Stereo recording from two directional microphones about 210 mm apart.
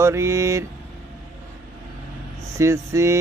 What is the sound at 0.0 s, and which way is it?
Speech, 15° right (ahead or behind).